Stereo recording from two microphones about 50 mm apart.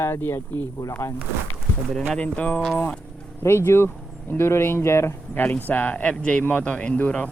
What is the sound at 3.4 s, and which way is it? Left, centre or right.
Speech, left.